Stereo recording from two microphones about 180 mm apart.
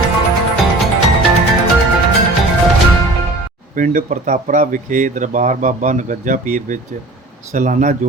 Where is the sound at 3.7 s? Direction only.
45° right (ahead or behind).